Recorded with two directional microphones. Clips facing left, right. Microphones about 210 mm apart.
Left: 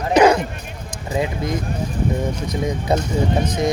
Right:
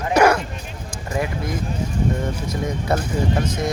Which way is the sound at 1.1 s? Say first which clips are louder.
Left 3 dB; 20° left (ahead or behind).